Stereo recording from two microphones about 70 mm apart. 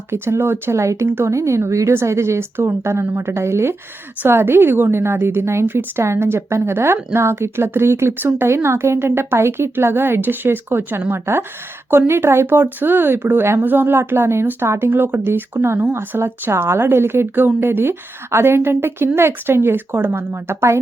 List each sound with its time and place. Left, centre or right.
0.1 s a woman's voice: right